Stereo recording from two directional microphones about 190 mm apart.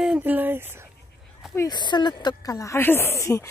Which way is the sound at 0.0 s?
5° right (ahead or behind).